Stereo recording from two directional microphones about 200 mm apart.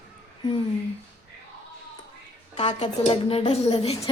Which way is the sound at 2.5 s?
25° left (ahead or behind).